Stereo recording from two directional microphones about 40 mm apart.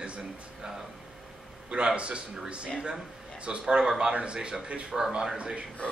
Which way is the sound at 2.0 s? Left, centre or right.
Right.